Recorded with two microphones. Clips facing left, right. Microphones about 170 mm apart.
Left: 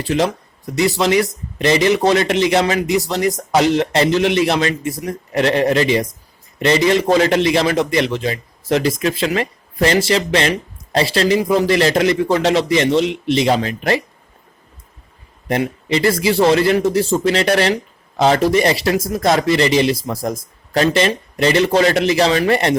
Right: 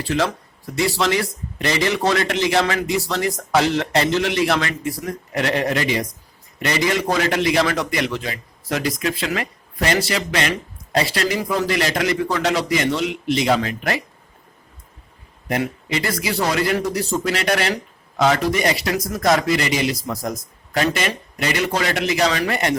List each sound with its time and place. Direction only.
0.0 s a man's voice: 20° left (ahead or behind)
15.4 s a man's voice: 30° left (ahead or behind)